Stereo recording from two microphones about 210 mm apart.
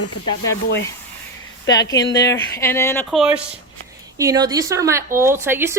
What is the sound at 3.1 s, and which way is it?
Speech, 5° right (ahead or behind).